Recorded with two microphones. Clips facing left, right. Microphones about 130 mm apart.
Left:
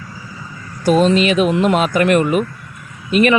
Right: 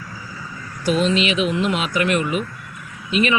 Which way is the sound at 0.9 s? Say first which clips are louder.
Left 6 dB; 45° left (ahead or behind).